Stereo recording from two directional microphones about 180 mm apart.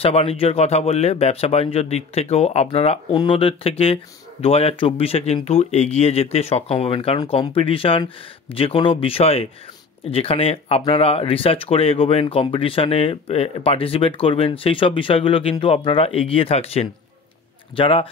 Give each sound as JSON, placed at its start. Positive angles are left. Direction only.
{"t": 0.0, "sound": "speech", "side_deg": 35}